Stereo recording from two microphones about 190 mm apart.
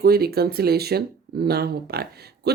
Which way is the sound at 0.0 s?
55° right (ahead or behind).